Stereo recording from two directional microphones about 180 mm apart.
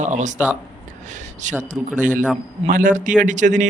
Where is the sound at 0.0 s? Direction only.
40° right (ahead or behind).